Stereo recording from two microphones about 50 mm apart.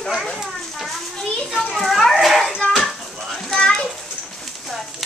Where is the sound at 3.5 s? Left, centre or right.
Centre.